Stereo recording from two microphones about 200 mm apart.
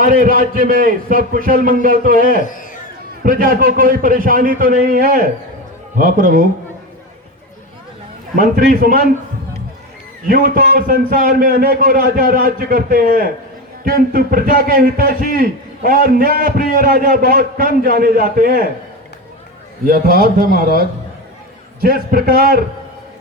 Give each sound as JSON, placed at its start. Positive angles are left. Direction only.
{"t": 0.0, "sound": "a man's voice", "side_deg": -45}
{"t": 8.4, "sound": "a man's voice", "side_deg": -45}
{"t": 10.2, "sound": "a man's voice", "side_deg": -45}
{"t": 19.8, "sound": "a man's voice", "side_deg": -50}